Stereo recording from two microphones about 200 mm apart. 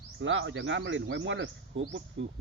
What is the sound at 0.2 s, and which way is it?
Speech, 70° right (ahead or behind).